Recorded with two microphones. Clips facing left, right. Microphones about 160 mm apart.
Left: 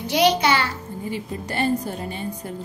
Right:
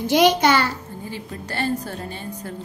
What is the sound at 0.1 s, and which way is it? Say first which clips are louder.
Speech: right 2 dB; 50° right (ahead or behind).